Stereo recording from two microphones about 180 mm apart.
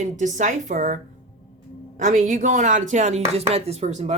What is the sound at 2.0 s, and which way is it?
Speech, 45° right (ahead or behind).